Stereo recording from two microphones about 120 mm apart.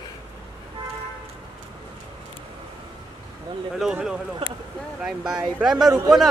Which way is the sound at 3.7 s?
5° right (ahead or behind).